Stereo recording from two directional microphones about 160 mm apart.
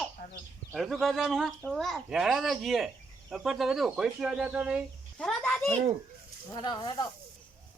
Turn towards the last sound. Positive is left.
turn(degrees=30)  # may be behind; listen again after turning